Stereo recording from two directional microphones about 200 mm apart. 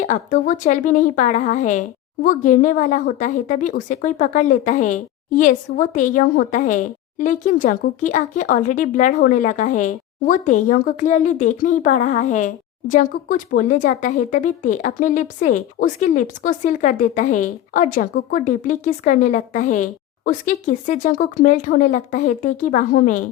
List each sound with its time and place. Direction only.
0.0 s a woman's voice: 40° left (ahead or behind)